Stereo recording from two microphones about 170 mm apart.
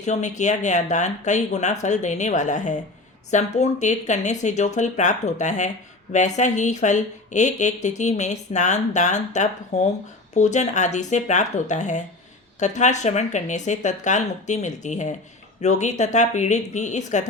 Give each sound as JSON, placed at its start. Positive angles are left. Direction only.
{"t": 0.0, "sound": "speech", "side_deg": 45}